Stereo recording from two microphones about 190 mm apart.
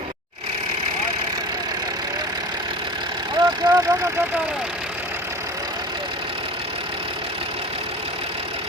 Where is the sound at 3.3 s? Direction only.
20° right (ahead or behind).